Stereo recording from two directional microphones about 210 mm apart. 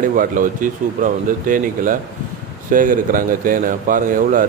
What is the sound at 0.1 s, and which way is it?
A man's voice, 40° right (ahead or behind).